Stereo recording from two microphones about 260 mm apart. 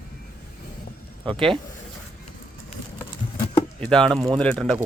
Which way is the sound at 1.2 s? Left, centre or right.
Centre.